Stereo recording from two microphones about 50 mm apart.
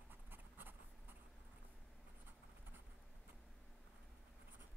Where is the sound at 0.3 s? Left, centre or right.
Right.